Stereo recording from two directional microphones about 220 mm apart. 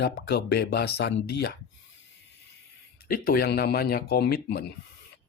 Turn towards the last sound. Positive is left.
turn(degrees=45)  # may be behind; listen again after turning